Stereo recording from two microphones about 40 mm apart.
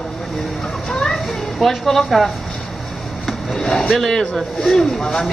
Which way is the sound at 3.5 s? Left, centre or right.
Centre.